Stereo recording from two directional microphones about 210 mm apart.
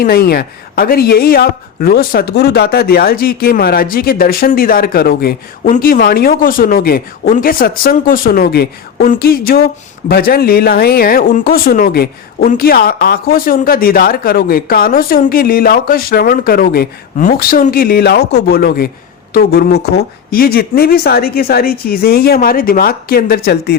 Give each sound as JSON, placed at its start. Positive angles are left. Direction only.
{"t": 0.0, "sound": "speech", "side_deg": 45}